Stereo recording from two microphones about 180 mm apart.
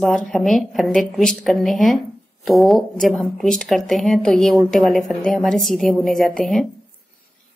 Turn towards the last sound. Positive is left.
turn(degrees=0)  # may be behind; listen again after turning